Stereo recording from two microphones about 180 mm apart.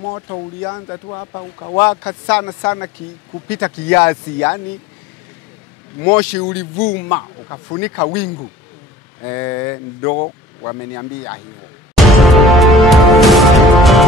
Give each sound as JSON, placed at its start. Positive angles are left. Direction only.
{"t": 0.1, "sound": "speech", "side_deg": 20}
{"t": 1.8, "sound": "speech", "side_deg": 10}
{"t": 5.9, "sound": "speech", "side_deg": 10}
{"t": 7.8, "sound": "speech", "side_deg": 10}
{"t": 12.2, "sound": "music", "side_deg": 0}